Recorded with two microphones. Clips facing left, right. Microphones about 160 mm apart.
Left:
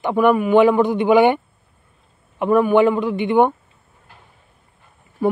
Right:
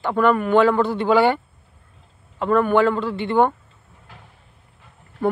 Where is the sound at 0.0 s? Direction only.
15° left (ahead or behind).